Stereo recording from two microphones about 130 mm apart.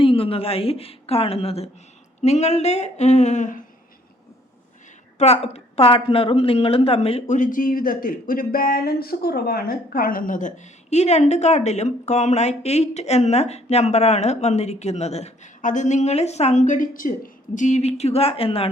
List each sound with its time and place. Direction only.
0.0 s a woman's voice: 45° left (ahead or behind); by 3.6 s 70° left (ahead or behind)
5.1 s a woman's voice: 55° left (ahead or behind)
7.3 s speech: 85° left
9.9 s a woman's voice: 90° left
17.5 s a woman's voice: 70° left (ahead or behind); by 18.7 s 45° left (ahead or behind)